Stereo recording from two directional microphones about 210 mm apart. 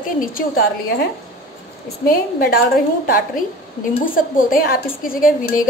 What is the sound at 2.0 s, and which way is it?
A woman's voice, 45° left (ahead or behind).